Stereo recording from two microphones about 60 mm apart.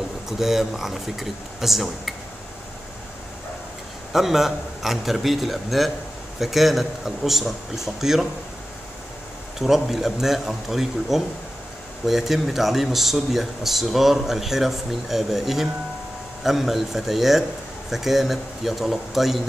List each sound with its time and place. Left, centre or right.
0.3 s a man's voice: centre
4.1 s a man's voice: centre
9.6 s a man's voice: centre